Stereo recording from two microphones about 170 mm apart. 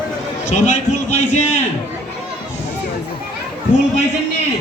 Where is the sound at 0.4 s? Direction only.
45° left (ahead or behind).